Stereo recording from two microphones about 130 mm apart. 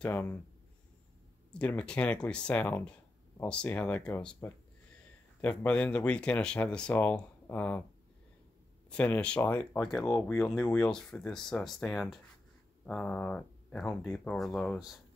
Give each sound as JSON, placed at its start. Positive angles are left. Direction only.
{"t": 0.0, "sound": "speech", "side_deg": 15}
{"t": 1.5, "sound": "speech", "side_deg": 10}
{"t": 8.9, "sound": "speech", "side_deg": 10}